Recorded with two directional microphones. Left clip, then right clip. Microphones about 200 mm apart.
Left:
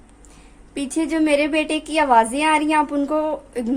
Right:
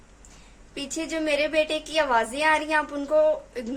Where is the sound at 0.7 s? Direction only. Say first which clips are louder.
Left 8 dB; 40° left (ahead or behind).